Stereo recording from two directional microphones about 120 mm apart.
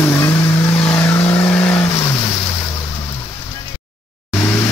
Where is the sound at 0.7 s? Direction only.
10° left (ahead or behind).